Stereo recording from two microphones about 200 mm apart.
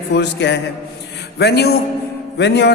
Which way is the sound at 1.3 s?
55° left (ahead or behind).